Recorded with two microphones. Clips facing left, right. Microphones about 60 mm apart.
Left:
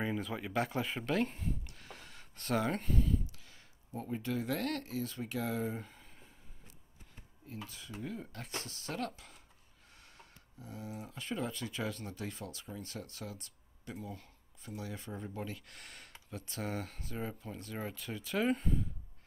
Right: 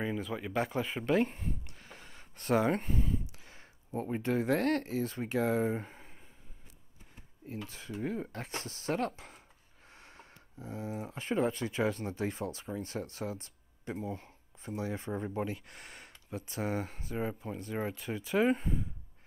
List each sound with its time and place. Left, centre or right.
0.0 s speech: centre
2.6 s speech: centre
7.6 s speech: right
9.8 s a sound: right
11.2 s speech: right
15.4 s speech: right